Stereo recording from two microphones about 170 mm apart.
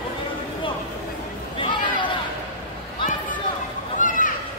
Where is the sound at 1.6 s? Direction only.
30° left (ahead or behind).